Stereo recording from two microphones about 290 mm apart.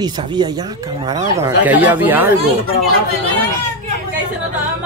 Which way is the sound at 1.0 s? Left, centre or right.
Centre.